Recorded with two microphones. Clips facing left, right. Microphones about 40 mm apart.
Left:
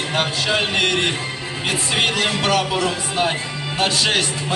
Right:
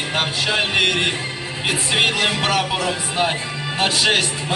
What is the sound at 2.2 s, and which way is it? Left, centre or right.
Speech, centre.